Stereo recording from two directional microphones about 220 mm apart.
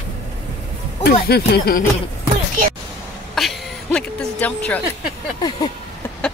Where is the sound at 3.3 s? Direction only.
Centre (ahead or behind).